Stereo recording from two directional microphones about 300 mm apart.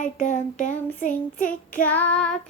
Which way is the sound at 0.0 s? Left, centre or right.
Left.